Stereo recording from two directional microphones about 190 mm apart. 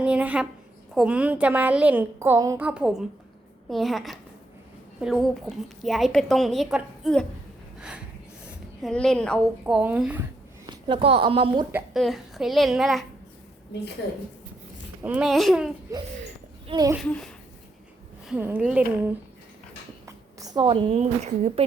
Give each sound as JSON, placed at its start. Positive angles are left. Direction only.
{"t": 0.0, "sound": "a sound", "side_deg": -5}
{"t": 0.9, "sound": "a woman's voice", "side_deg": -5}
{"t": 7.8, "sound": "snort", "side_deg": -5}
{"t": 8.4, "sound": "a woman's voice", "side_deg": 0}
{"t": 10.7, "sound": "speech", "side_deg": -25}
{"t": 11.7, "sound": "a woman's voice", "side_deg": 0}
{"t": 15.0, "sound": "a woman's voice", "side_deg": -5}
{"t": 16.6, "sound": "speech", "side_deg": -20}
{"t": 17.0, "sound": "a woman's voice", "side_deg": 5}
{"t": 18.3, "sound": "a woman's voice", "side_deg": -10}
{"t": 20.1, "sound": "a woman's voice", "side_deg": -20}